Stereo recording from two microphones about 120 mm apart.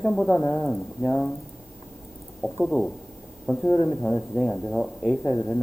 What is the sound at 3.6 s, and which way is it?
Speech, 20° left (ahead or behind).